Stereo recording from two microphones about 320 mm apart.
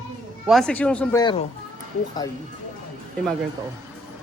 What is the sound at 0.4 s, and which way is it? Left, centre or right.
Speech, centre.